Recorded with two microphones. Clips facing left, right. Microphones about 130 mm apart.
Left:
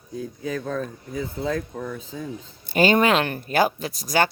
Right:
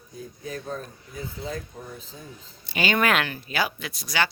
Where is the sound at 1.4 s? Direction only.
85° left.